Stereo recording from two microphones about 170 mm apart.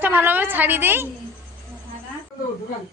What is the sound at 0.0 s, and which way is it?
Speech, 10° right (ahead or behind).